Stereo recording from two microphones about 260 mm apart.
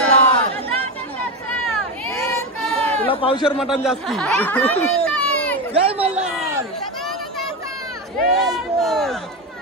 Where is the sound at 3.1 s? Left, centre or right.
Left.